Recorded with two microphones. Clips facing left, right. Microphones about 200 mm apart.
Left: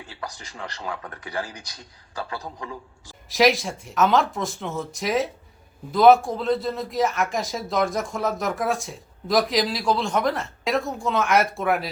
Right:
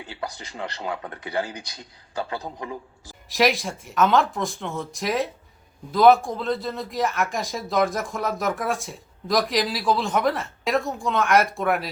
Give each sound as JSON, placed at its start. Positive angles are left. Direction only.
{"t": 0.1, "sound": "speech", "side_deg": -30}
{"t": 3.2, "sound": "speech", "side_deg": 0}